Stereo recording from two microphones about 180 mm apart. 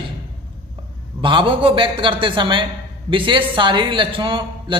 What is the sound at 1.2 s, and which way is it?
A man's voice, 30° right (ahead or behind).